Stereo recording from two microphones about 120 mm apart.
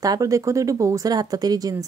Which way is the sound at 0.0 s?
30° right (ahead or behind).